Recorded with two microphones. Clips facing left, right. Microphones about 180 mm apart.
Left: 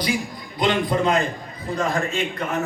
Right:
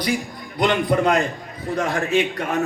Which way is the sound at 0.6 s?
65° right (ahead or behind).